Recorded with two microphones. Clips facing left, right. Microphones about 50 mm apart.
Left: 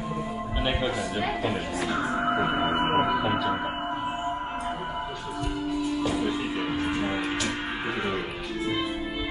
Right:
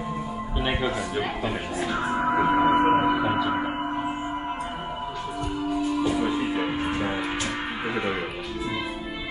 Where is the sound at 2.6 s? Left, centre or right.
Centre.